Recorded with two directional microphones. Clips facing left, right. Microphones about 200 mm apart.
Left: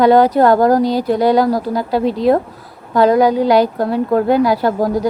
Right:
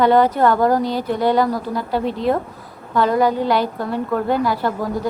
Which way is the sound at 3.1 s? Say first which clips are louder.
Left 5 dB; 90° left.